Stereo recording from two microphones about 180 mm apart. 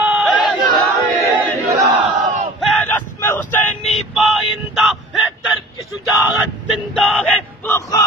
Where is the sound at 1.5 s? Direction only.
40° right (ahead or behind).